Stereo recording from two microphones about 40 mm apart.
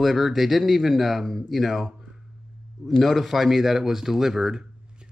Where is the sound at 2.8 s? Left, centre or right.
Centre.